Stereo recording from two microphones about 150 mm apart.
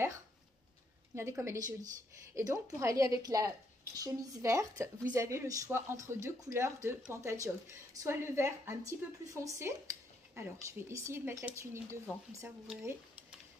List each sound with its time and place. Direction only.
1.1 s a woman's voice: 20° right (ahead or behind)